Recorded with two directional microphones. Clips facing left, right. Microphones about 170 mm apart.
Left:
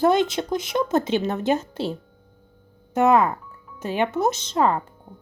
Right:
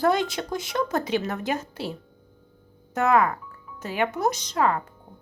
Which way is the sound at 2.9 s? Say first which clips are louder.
Left 3 dB; 20° left (ahead or behind).